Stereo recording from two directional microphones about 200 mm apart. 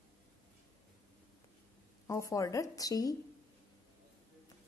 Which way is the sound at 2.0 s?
15° left (ahead or behind).